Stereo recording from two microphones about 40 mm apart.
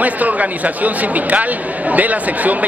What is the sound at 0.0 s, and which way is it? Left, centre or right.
Speech, right.